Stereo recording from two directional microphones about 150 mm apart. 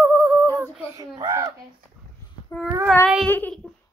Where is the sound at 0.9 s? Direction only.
25° right (ahead or behind).